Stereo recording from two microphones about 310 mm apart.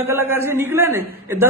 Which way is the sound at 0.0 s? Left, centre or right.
Centre.